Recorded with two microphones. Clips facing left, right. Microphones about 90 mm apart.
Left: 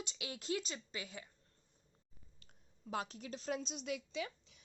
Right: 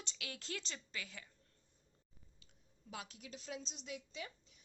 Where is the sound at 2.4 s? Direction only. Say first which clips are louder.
Left 8 dB; 45° left (ahead or behind).